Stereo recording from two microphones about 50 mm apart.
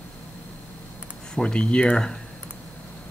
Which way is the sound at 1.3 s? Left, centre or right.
Centre.